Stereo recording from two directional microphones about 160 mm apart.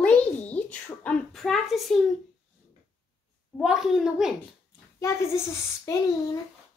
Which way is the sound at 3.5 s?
5° right (ahead or behind).